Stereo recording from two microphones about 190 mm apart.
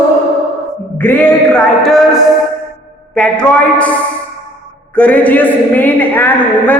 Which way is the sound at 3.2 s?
5° left (ahead or behind).